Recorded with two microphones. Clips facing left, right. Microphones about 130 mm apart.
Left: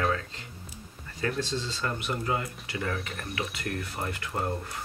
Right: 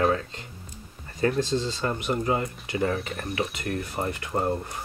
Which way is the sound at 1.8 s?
30° right (ahead or behind).